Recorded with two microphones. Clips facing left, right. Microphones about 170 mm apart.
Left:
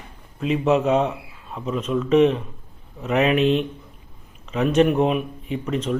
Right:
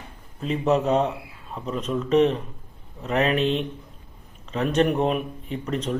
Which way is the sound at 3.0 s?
5° left (ahead or behind).